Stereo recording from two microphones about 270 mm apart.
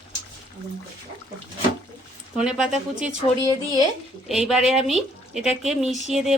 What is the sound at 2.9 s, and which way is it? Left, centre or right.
Speech, right.